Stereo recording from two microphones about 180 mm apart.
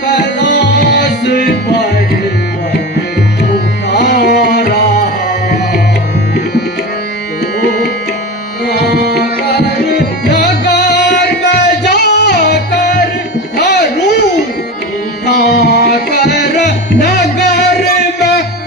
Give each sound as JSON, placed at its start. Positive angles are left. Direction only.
{"t": 0.1, "sound": "music", "side_deg": 75}
{"t": 3.9, "sound": "tabla", "side_deg": 70}
{"t": 8.7, "sound": "music", "side_deg": 65}